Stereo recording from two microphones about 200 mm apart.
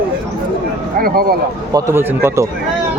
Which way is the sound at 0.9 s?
50° right (ahead or behind).